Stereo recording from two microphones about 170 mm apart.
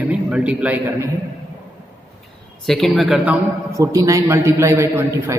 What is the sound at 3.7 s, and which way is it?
A man's voice, 20° right (ahead or behind).